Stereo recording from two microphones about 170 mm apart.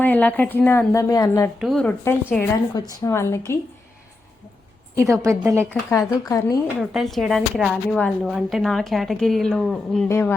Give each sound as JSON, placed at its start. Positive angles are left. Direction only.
{"t": 0.0, "sound": "a woman's voice", "side_deg": 10}
{"t": 1.5, "sound": "a woman's voice", "side_deg": 0}
{"t": 4.9, "sound": "a woman's voice", "side_deg": -15}
{"t": 5.9, "sound": "a woman's voice", "side_deg": 20}
{"t": 6.7, "sound": "a woman's voice", "side_deg": 0}
{"t": 10.1, "sound": "a woman's voice", "side_deg": 15}